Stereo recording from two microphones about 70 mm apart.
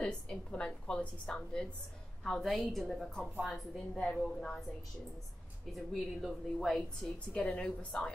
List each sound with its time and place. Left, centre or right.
0.0 s a woman's voice: centre
5.7 s a woman's voice: centre
7.3 s a woman's voice: centre